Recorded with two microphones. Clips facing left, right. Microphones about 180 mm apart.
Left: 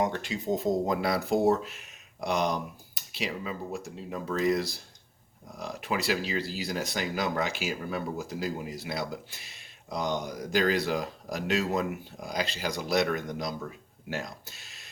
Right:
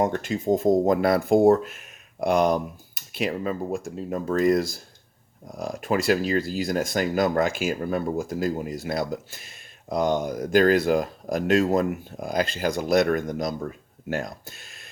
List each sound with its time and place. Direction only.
0.0 s speech: 50° right (ahead or behind)